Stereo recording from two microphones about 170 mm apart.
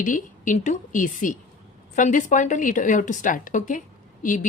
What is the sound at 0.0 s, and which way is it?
A woman's voice, 50° left (ahead or behind).